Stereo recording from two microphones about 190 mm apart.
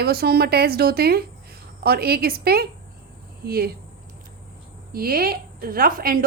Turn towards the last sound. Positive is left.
turn(degrees=-50)  # may be behind; listen again after turning